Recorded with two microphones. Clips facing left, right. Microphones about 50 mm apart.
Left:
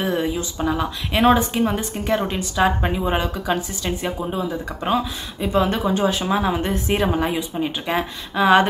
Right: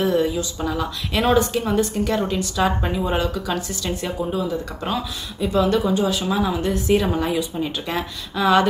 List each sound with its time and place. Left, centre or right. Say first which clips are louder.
0.0 s speech: right 2 dB; left